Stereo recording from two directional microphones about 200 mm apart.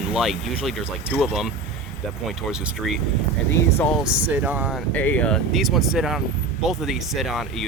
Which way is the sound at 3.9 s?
5° right (ahead or behind).